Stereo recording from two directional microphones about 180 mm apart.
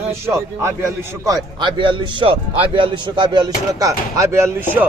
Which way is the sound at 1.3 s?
25° right (ahead or behind).